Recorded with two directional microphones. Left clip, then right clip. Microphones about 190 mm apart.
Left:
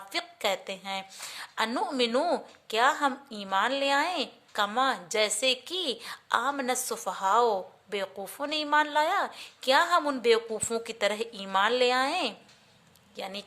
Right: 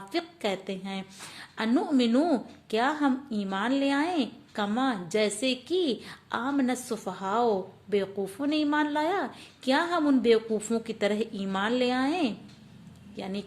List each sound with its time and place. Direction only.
0.1 s a woman's voice: 20° left (ahead or behind)